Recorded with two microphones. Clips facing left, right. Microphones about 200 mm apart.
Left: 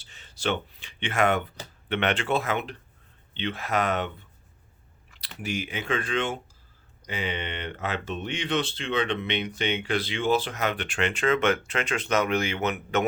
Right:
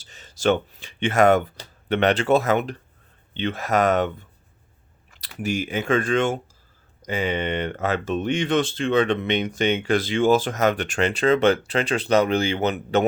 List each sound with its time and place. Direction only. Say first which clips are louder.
0.0 s speech: right 8 dB; 40° right (ahead or behind)
5.4 s speech: right 7 dB; 45° right (ahead or behind)